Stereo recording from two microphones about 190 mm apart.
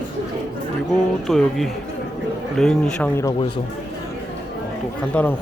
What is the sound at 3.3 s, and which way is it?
Speech, 25° left (ahead or behind).